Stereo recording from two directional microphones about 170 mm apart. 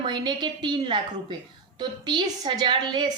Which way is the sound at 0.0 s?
25° right (ahead or behind).